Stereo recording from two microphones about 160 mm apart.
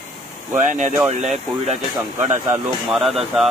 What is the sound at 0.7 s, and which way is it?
Speech, 50° right (ahead or behind).